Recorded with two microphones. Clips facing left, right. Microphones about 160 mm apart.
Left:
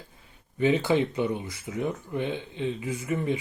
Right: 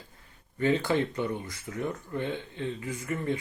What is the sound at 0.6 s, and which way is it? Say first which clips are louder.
Speech: left 3 dB; 15° left (ahead or behind).